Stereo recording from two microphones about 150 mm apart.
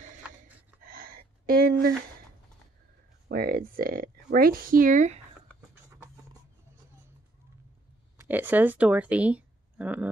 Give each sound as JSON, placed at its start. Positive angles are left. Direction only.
{"t": 0.8, "sound": "a sound", "side_deg": -70}
{"t": 3.3, "sound": "speech", "side_deg": -80}
{"t": 8.2, "sound": "speech", "side_deg": -10}